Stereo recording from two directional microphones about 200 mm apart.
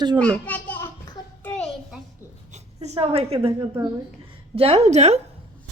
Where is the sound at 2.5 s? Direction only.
35° right (ahead or behind).